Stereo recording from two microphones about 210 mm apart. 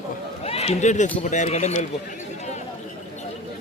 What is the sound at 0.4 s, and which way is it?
A man's voice, 30° left (ahead or behind).